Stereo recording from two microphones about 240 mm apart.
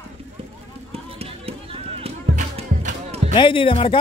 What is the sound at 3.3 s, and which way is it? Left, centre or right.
Speech, left.